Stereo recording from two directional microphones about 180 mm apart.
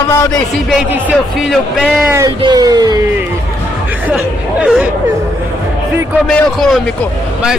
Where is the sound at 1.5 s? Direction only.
Centre (ahead or behind).